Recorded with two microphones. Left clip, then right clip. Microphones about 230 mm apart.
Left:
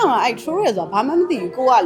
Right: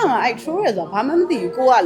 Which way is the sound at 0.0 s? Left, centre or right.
Centre.